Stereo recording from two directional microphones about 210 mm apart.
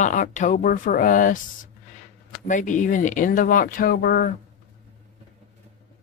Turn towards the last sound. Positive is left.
turn(degrees=45)  # may be behind; listen again after turning